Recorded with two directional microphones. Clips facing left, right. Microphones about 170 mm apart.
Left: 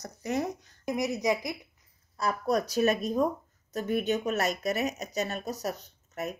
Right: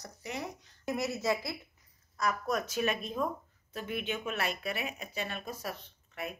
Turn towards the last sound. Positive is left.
turn(degrees=40)  # may be behind; listen again after turning